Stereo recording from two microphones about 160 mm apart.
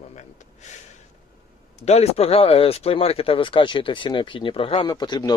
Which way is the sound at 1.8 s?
40° left (ahead or behind).